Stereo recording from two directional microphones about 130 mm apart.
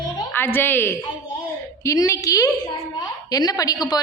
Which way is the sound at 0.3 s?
15° left (ahead or behind).